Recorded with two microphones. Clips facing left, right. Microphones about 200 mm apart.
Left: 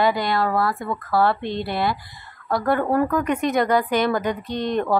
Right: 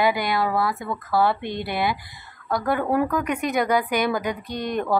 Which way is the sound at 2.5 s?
Centre (ahead or behind).